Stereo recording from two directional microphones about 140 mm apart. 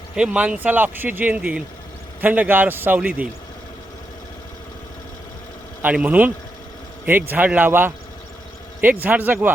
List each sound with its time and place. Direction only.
0.2 s speech: 10° right (ahead or behind)
5.8 s speech: 10° right (ahead or behind)